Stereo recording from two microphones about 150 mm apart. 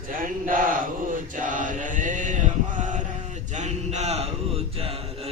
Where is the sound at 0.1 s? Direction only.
65° right (ahead or behind).